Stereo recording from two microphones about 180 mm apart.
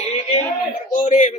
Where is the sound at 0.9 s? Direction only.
45° left (ahead or behind).